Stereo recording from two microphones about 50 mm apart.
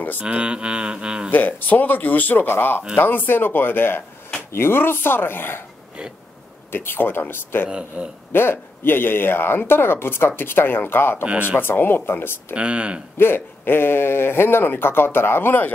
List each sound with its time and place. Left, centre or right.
0.2 s speech: right
1.3 s speech: left
6.7 s speech: left
7.6 s speech: right
8.3 s speech: left
12.5 s speech: right
13.2 s speech: left